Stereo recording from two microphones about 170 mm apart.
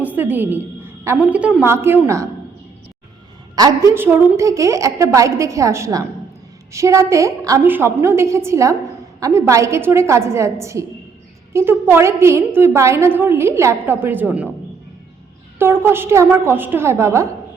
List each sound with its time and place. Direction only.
0.0 s a sound: 10° right (ahead or behind)
1.2 s a woman's voice: 5° right (ahead or behind)
3.5 s a woman's voice: 20° right (ahead or behind)
15.5 s a woman's voice: 15° right (ahead or behind)